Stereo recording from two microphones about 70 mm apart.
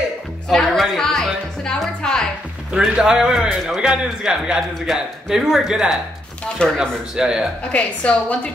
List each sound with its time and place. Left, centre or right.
0.5 s music: centre
2.7 s a man's voice: centre
7.7 s a woman's voice: centre